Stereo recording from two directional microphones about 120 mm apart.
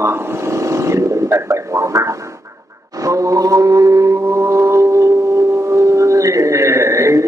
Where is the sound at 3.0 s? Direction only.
25° right (ahead or behind).